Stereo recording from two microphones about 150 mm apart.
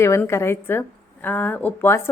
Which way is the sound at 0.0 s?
20° left (ahead or behind).